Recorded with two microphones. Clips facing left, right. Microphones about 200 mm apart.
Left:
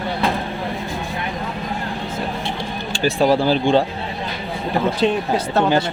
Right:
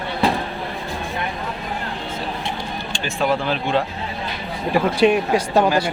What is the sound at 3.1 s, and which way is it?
Speech, 35° left (ahead or behind).